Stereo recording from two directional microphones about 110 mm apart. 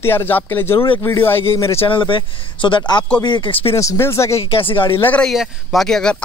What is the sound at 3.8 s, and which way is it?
Speech, 25° left (ahead or behind).